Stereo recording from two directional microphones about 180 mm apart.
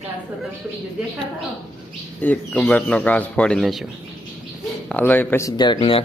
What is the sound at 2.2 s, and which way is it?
Speech, 10° left (ahead or behind).